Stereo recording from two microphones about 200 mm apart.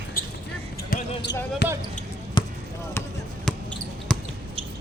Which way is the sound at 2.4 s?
25° left (ahead or behind).